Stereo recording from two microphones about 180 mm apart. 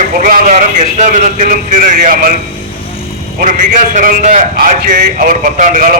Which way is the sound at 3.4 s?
45° right (ahead or behind).